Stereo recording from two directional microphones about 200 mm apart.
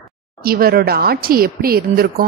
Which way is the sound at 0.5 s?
50° right (ahead or behind).